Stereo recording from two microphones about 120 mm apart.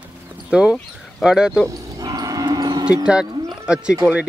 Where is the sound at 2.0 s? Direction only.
30° right (ahead or behind).